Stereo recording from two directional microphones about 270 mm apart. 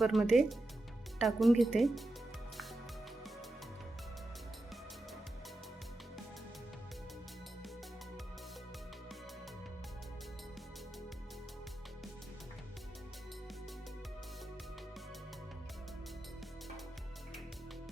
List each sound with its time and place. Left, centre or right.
0.0 s speech: centre